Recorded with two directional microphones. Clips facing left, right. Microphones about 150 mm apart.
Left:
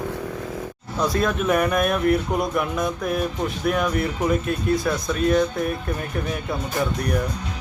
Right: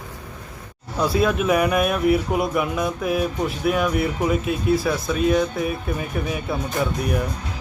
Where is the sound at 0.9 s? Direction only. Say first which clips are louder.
Right 2 dB; 5° right (ahead or behind).